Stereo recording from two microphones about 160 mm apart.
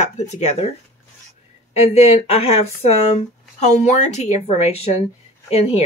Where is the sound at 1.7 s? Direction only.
40° left (ahead or behind).